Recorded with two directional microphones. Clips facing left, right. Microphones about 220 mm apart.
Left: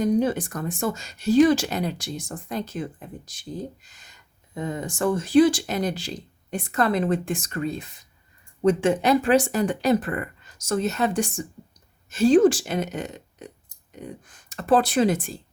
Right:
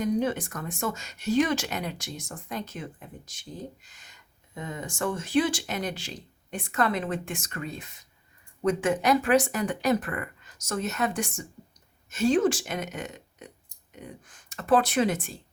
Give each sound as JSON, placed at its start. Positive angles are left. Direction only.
{"t": 0.0, "sound": "speech", "side_deg": 35}
{"t": 4.5, "sound": "speech", "side_deg": 35}